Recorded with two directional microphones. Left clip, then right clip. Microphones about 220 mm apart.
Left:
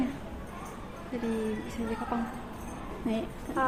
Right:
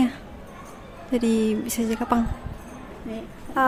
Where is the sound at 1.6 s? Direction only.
55° right (ahead or behind).